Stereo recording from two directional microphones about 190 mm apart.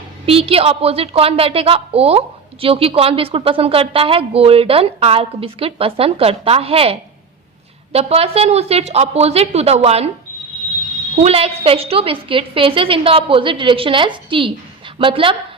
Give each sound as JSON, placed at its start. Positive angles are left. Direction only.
{"t": 0.3, "sound": "a woman's voice", "side_deg": -30}
{"t": 7.9, "sound": "a woman's voice", "side_deg": -30}
{"t": 11.2, "sound": "a woman's voice", "side_deg": -30}